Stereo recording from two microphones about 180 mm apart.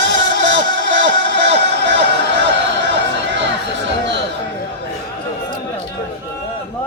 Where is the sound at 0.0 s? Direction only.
85° right.